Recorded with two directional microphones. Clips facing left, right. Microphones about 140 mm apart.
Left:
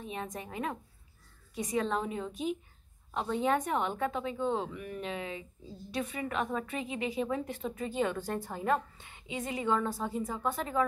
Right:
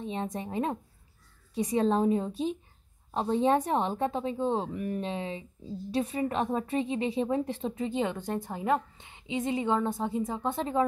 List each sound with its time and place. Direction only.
0.0 s a woman's voice: 30° right (ahead or behind)